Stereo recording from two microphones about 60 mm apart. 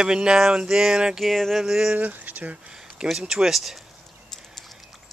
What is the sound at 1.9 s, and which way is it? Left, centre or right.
Speech, right.